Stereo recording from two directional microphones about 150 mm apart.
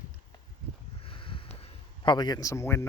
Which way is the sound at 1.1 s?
35° left (ahead or behind).